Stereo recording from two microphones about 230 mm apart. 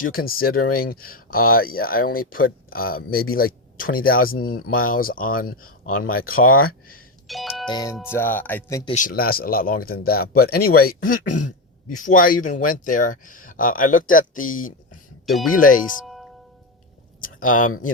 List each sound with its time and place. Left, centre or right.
0.0 s speech: left
7.3 s doorbell: centre
7.7 s speech: centre
8.9 s speech: left
17.2 s a sound: left